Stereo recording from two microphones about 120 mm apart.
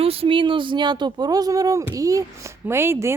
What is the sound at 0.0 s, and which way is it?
Speech, 55° right (ahead or behind).